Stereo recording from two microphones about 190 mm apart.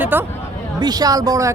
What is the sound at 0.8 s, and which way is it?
Speech, 20° right (ahead or behind).